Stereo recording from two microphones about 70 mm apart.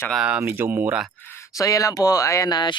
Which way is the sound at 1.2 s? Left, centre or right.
Left.